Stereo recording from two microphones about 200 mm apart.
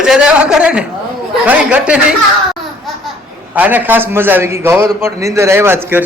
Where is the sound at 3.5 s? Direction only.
10° right (ahead or behind).